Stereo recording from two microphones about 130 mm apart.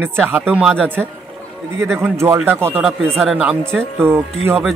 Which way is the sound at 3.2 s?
5° right (ahead or behind).